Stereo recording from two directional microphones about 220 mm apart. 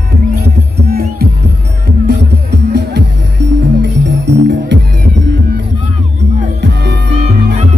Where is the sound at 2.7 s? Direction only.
50° right (ahead or behind).